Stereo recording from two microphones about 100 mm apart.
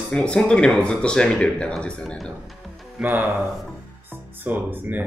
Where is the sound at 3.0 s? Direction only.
25° right (ahead or behind).